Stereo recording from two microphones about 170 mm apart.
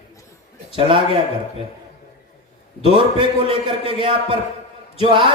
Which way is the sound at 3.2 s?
30° right (ahead or behind).